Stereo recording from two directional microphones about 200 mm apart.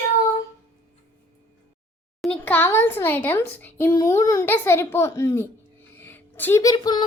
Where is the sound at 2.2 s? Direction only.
5° left (ahead or behind).